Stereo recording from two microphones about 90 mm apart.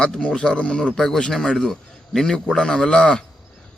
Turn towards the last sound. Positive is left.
turn(degrees=10)  # may be behind; listen again after turning